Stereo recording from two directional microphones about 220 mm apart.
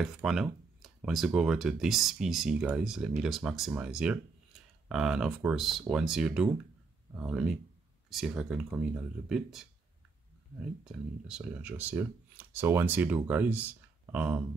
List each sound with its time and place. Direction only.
0.0 s speech: centre (ahead or behind)
10.8 s speech: 5° right (ahead or behind)